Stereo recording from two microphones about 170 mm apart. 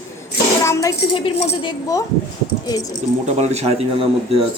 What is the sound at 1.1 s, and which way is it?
Speech, 30° left (ahead or behind).